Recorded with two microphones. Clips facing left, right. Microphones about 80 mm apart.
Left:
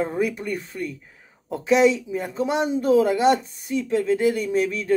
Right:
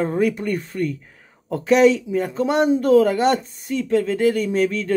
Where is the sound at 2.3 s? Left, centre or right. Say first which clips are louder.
Right 4 dB; right.